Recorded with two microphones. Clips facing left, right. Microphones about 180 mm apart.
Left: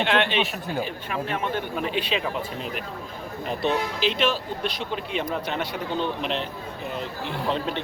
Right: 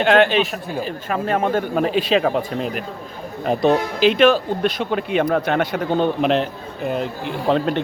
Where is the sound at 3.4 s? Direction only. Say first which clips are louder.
Right 8 dB; 45° right (ahead or behind).